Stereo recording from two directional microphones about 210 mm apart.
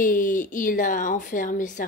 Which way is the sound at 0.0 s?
40° left (ahead or behind).